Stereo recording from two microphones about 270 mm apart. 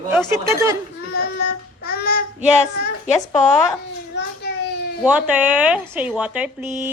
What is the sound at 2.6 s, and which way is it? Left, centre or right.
Speech, left.